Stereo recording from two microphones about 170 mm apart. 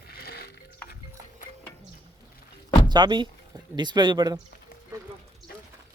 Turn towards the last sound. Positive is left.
turn(degrees=-25)  # may be behind; listen again after turning